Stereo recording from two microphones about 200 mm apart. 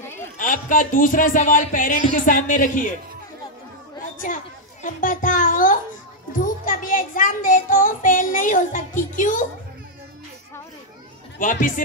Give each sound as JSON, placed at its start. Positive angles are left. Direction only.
{"t": 0.4, "sound": "a child's voice", "side_deg": 40}
{"t": 4.2, "sound": "a child's voice", "side_deg": 40}
{"t": 11.3, "sound": "a man's voice", "side_deg": 40}